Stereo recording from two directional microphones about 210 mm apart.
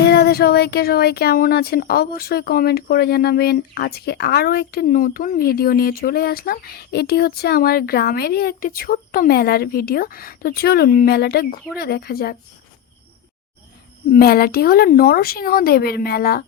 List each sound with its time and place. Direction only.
0.0 s speech: 50° left (ahead or behind)
14.1 s speech: 45° left (ahead or behind)